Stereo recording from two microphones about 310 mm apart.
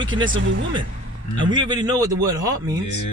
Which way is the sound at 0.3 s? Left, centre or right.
Right.